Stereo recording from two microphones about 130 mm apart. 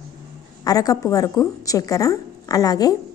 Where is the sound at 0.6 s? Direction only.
30° left (ahead or behind).